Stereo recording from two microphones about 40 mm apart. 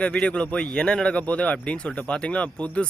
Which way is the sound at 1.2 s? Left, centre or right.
Left.